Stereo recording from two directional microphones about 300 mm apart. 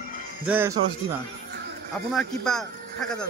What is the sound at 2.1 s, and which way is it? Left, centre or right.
Speech, centre.